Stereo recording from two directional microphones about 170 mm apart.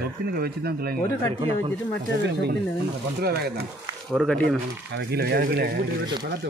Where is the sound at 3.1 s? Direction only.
70° right (ahead or behind).